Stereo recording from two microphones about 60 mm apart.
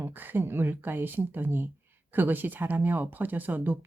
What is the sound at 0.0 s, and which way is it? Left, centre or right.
Speech, right.